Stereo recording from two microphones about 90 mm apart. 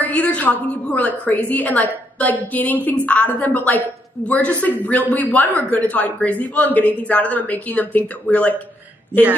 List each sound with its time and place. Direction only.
0.0 s a woman's voice: 15° left (ahead or behind)